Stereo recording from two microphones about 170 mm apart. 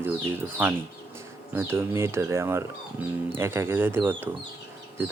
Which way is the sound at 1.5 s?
15° right (ahead or behind).